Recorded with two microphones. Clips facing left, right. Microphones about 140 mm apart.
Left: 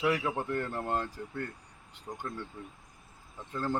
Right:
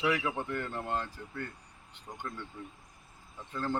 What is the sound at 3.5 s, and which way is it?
Speech, 10° left (ahead or behind).